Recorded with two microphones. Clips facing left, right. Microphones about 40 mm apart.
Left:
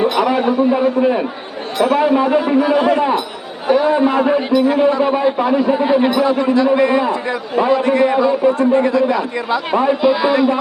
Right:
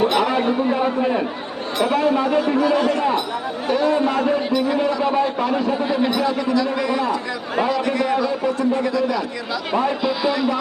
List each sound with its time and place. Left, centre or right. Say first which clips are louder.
0.1 s a man's voice: left 3 dB; centre; by 9.6 s left
9.7 s a man's voice: left 6 dB; centre